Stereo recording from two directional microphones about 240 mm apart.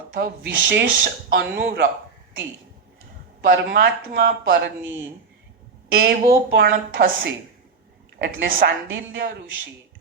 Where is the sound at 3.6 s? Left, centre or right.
Right.